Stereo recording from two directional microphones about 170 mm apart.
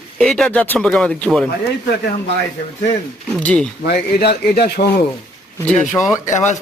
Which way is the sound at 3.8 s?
70° left (ahead or behind).